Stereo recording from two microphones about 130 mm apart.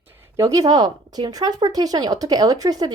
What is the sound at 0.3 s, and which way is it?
Speech, 25° right (ahead or behind).